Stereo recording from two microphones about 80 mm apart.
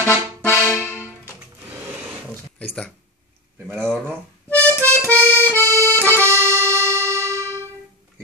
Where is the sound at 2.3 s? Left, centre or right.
Centre.